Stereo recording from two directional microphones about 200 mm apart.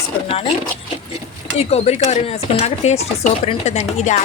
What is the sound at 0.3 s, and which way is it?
Speech, 30° left (ahead or behind).